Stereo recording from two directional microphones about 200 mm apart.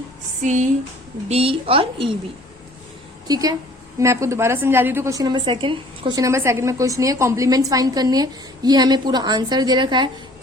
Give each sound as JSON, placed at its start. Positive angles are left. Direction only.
{"t": 0.4, "sound": "a woman's voice", "side_deg": -35}
{"t": 3.2, "sound": "a woman's voice", "side_deg": -20}